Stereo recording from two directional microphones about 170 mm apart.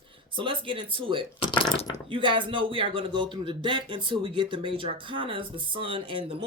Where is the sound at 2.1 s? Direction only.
30° right (ahead or behind).